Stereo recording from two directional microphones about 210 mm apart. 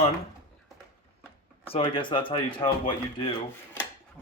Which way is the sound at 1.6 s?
25° left (ahead or behind).